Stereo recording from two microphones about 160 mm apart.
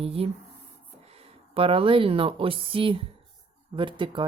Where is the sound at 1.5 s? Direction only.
35° right (ahead or behind).